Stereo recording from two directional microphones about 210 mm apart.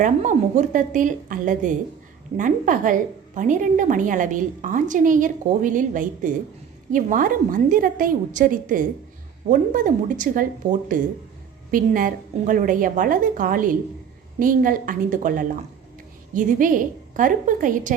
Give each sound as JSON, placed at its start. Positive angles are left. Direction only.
{"t": 0.0, "sound": "a woman's voice", "side_deg": -35}